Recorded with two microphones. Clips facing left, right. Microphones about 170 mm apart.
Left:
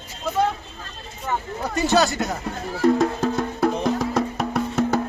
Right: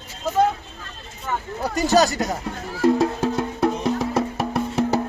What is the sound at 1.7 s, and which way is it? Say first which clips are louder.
Speech: right 1 dB; 40° right (ahead or behind).